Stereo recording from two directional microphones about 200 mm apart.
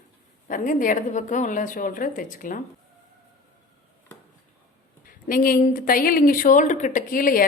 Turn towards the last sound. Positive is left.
turn(degrees=45)  # may be behind; listen again after turning